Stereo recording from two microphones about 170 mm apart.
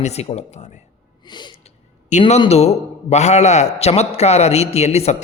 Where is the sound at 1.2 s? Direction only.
25° left (ahead or behind).